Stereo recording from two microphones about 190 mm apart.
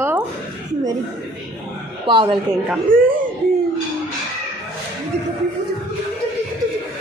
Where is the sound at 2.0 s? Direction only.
25° right (ahead or behind).